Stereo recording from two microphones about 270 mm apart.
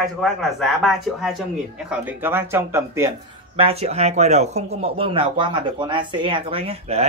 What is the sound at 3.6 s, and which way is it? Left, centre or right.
Speech, right.